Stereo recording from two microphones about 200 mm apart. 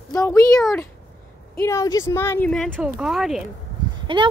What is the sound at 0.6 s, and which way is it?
Speech, centre (ahead or behind).